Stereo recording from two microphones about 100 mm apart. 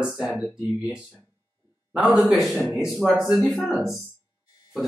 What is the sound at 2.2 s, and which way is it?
Speech, 10° right (ahead or behind).